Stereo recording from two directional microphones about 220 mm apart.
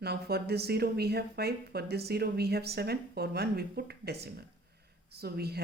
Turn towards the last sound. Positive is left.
turn(degrees=-45)  # may be behind; listen again after turning